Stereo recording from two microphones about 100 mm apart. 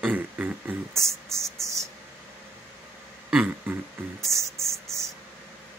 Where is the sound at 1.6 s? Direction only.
30° right (ahead or behind).